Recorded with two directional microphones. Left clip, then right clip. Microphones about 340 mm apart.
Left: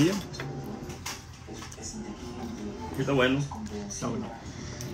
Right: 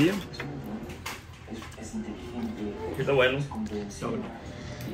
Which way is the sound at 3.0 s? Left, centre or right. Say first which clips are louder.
Right 2 dB; left.